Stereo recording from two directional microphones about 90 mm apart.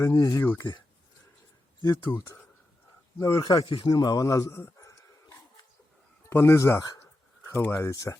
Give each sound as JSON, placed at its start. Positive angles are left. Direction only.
{"t": 0.0, "sound": "speech", "side_deg": 35}
{"t": 0.4, "sound": "speech", "side_deg": 25}
{"t": 3.2, "sound": "a man's voice", "side_deg": 50}